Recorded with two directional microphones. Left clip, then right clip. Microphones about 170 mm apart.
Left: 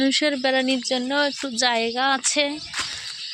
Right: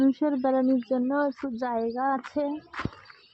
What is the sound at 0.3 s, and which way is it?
Speech, 5° right (ahead or behind).